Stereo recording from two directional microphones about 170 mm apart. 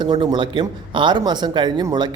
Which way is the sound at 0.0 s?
25° right (ahead or behind).